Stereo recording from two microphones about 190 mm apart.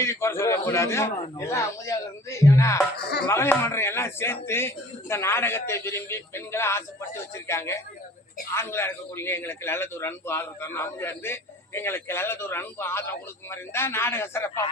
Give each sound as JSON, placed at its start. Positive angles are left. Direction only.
{"t": 0.0, "sound": "a man's voice", "side_deg": 15}
{"t": 3.0, "sound": "speech", "side_deg": 60}
{"t": 3.2, "sound": "a man's voice", "side_deg": 15}